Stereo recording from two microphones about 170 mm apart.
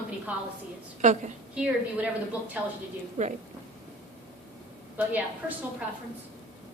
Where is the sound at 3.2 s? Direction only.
45° right (ahead or behind).